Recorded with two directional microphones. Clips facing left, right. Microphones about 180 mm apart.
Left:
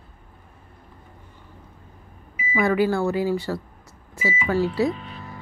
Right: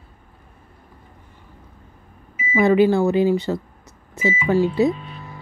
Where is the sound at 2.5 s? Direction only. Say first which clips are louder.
Right 5 dB; 20° right (ahead or behind).